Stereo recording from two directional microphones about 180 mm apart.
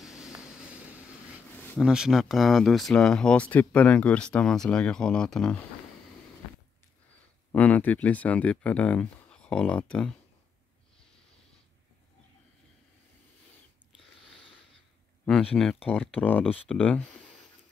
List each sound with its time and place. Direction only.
0.0 s vehicle: centre (ahead or behind)
1.8 s speech: 5° right (ahead or behind)
7.5 s speech: 10° left (ahead or behind)
15.2 s speech: 5° left (ahead or behind)